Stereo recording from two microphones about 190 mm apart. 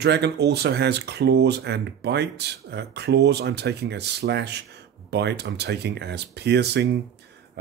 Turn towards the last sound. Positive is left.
turn(degrees=-60)  # may be behind; listen again after turning